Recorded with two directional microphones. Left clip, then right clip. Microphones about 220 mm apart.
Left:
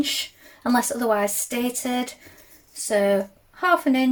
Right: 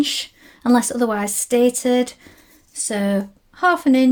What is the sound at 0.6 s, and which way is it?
Speech, 45° right (ahead or behind).